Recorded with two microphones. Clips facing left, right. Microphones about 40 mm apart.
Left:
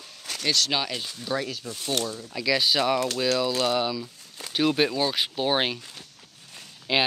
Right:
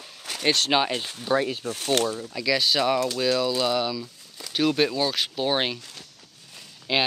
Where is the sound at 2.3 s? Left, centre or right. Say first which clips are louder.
Left 3 dB; centre.